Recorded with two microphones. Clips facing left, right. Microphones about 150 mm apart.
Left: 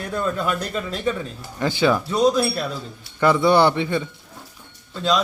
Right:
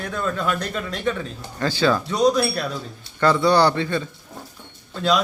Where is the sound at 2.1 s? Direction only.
5° left (ahead or behind).